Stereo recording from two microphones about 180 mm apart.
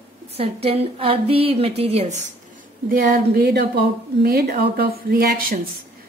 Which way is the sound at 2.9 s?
60° right (ahead or behind).